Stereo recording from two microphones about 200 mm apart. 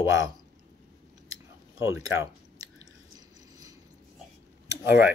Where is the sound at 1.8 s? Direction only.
80° left.